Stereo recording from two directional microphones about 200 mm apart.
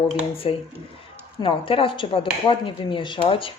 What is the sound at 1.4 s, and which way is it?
Speech, 25° left (ahead or behind).